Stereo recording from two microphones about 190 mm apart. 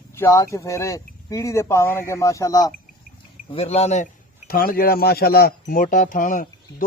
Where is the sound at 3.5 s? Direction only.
30° left (ahead or behind).